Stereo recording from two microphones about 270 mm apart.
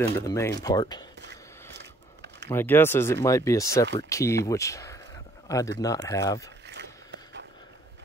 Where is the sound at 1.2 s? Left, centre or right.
Right.